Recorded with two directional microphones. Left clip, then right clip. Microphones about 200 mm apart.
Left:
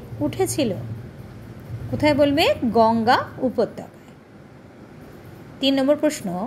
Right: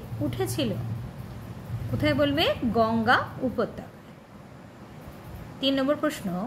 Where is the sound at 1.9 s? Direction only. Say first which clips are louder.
Left 6 dB; 25° left (ahead or behind).